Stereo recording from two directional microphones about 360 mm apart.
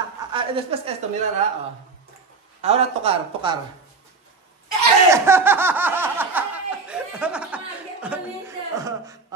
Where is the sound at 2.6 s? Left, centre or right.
Centre.